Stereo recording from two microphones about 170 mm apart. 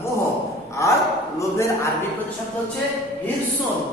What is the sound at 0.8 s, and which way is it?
A man's voice, 15° left (ahead or behind).